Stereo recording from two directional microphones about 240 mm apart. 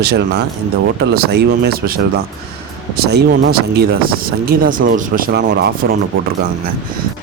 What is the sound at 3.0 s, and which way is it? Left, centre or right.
Speech, right.